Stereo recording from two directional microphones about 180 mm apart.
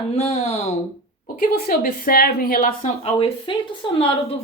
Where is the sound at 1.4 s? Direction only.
55° left (ahead or behind).